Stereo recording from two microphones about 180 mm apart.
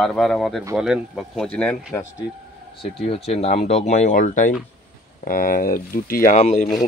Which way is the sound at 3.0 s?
35° left (ahead or behind).